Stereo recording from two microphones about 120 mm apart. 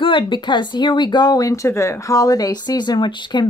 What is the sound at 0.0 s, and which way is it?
A woman's voice, 40° left (ahead or behind).